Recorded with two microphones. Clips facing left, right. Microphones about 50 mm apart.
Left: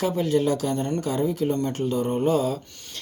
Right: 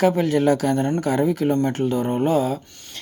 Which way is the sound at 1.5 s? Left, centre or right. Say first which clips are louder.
Right 4 dB; right.